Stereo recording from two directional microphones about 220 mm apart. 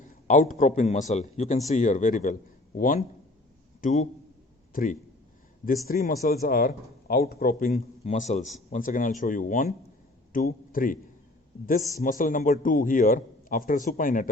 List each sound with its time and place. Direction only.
0.0 s a man's voice: 35° left (ahead or behind)